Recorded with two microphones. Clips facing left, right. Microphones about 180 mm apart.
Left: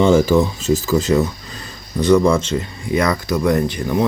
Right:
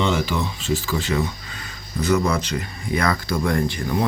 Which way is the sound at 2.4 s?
25° left (ahead or behind).